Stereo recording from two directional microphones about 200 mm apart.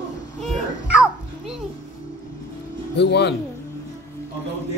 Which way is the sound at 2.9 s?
60° left (ahead or behind).